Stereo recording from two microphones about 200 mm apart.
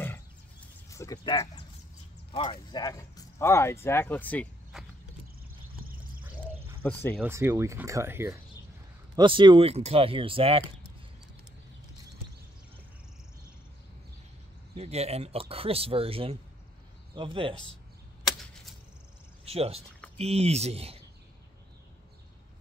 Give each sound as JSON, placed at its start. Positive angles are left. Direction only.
{"t": 0.8, "sound": "speech", "side_deg": 15}
{"t": 6.8, "sound": "speech", "side_deg": 10}
{"t": 7.2, "sound": "speech", "side_deg": -10}
{"t": 9.1, "sound": "speech", "side_deg": -25}
{"t": 14.8, "sound": "speech", "side_deg": -30}
{"t": 19.4, "sound": "speech", "side_deg": -30}